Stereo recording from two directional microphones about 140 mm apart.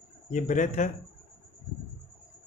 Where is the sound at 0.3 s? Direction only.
65° left (ahead or behind).